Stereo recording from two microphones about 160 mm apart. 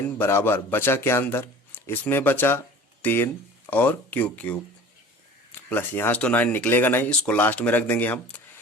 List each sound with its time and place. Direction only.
0.2 s speech: 15° left (ahead or behind)
5.6 s speech: 10° left (ahead or behind)